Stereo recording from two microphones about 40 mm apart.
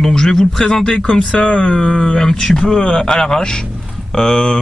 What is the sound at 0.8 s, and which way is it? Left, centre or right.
Speech, left.